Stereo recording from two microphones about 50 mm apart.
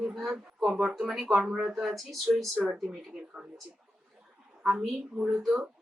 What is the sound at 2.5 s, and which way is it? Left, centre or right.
Speech, right.